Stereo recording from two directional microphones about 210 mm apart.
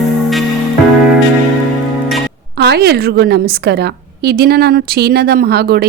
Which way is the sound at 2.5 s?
50° right (ahead or behind).